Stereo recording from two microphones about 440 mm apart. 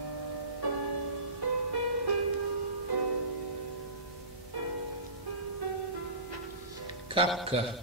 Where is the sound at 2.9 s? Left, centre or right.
Right.